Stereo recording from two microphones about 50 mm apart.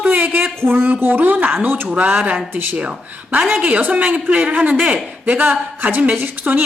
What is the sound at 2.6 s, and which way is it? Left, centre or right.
A woman's voice, right.